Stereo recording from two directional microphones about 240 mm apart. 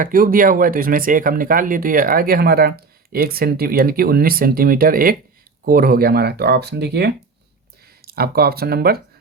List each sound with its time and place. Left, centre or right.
0.0 s speech: right